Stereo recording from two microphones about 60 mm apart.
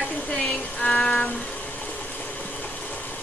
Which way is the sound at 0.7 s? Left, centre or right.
Centre.